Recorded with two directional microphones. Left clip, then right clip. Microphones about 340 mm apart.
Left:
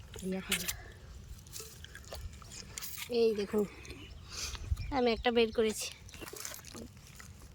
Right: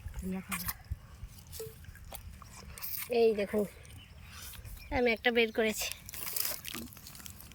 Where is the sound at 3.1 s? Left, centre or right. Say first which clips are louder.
Right 3 dB; centre.